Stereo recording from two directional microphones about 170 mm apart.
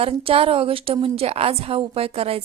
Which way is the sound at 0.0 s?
35° right (ahead or behind).